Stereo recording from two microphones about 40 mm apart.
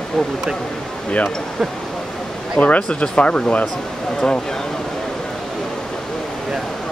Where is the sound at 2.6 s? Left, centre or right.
Left.